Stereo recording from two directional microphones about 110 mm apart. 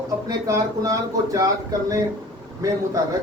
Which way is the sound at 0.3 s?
30° right (ahead or behind).